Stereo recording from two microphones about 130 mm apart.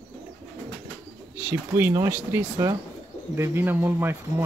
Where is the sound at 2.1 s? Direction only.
10° right (ahead or behind).